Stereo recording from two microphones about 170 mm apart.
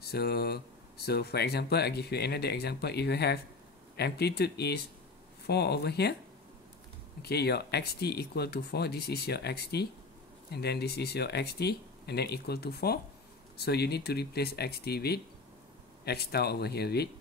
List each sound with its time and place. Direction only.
0.0 s speech: 70° left (ahead or behind)
7.2 s speech: 70° left (ahead or behind)